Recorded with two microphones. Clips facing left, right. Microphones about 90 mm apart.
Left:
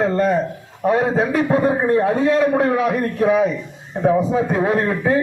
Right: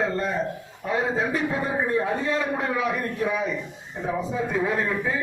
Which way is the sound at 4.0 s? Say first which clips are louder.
Left 10 dB; 70° left (ahead or behind).